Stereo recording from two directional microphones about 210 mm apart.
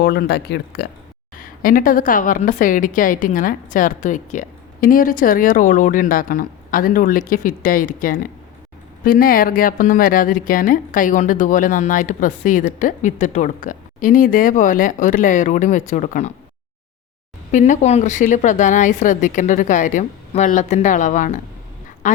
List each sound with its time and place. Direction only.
0.0 s speech: 50° left (ahead or behind)
1.4 s speech: 40° left (ahead or behind)
17.5 s speech: 35° left (ahead or behind)
22.0 s duck: 35° left (ahead or behind)